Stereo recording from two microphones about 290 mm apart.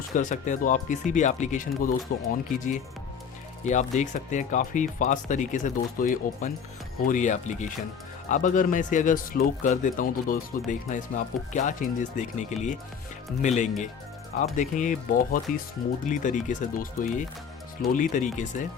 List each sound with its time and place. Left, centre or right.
0.1 s speech: left